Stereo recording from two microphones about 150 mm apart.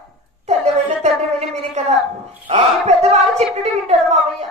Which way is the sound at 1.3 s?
45° right (ahead or behind).